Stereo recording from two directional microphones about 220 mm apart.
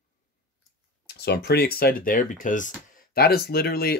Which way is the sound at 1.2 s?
45° left (ahead or behind).